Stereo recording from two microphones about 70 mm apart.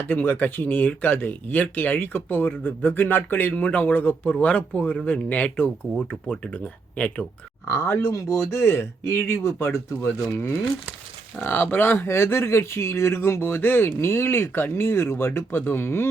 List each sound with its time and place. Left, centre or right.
0.1 s speech: left
3.5 s speech: centre
7.6 s speech: left
11.4 s speech: left